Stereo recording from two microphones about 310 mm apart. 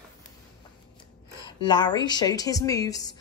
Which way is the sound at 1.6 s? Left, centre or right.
Centre.